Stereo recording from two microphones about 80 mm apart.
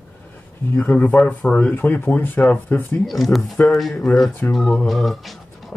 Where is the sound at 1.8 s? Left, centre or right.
Left.